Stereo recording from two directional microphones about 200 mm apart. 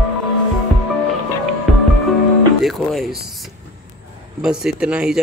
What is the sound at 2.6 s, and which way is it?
Speech, centre (ahead or behind).